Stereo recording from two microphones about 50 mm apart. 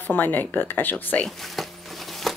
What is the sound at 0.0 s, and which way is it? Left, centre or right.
Speech, left.